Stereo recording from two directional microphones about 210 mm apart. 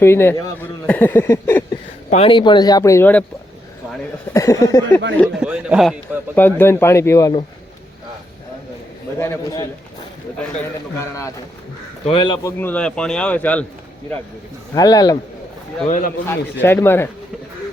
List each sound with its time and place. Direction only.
0.0 s speech: 10° left (ahead or behind)
2.0 s speech: 30° left (ahead or behind); by 3.2 s 10° left (ahead or behind)
4.3 s speech: 15° left (ahead or behind)
5.2 s speech: 5° right (ahead or behind)
6.3 s speech: 10° left (ahead or behind)
9.1 s speech: 15° left (ahead or behind)
12.0 s speech: 25° left (ahead or behind); by 13.7 s 5° left (ahead or behind)
14.8 s speech: 15° left (ahead or behind)
15.9 s a man's voice: 40° left (ahead or behind)
16.2 s speech: 10° left (ahead or behind)